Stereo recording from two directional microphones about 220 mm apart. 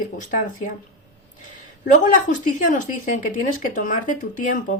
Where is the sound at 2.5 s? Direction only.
35° left (ahead or behind).